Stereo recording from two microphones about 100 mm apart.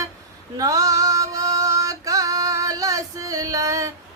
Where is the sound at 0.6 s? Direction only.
35° right (ahead or behind).